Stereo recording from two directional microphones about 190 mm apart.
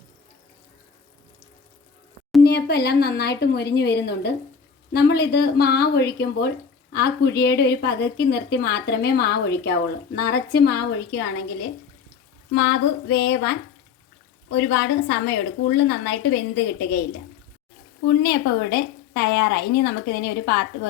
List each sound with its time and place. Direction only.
2.4 s speech: 55° left (ahead or behind)
12.5 s a sound: 65° left (ahead or behind)
14.5 s speech: 65° left (ahead or behind)
18.2 s speech: 55° left (ahead or behind)